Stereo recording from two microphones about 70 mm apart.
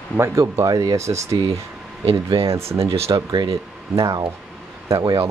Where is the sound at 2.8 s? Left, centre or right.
Right.